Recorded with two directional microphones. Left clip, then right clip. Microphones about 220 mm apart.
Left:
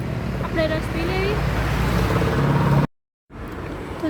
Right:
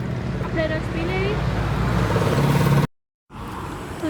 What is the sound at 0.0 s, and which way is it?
Vehicle, 40° left (ahead or behind).